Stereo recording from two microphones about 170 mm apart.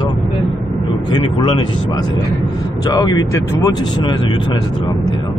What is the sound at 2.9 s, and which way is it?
Speech, 25° left (ahead or behind).